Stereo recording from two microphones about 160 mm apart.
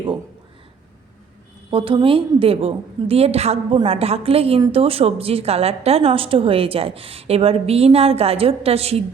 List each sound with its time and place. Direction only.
1.7 s a woman's voice: 35° right (ahead or behind)